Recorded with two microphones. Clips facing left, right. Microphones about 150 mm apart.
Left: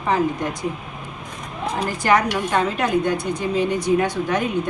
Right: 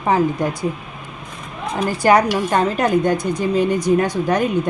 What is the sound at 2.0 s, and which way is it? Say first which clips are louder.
A woman's voice: right 4 dB; 35° right (ahead or behind).